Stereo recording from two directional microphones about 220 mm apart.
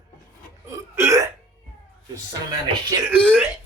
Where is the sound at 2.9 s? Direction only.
5° right (ahead or behind).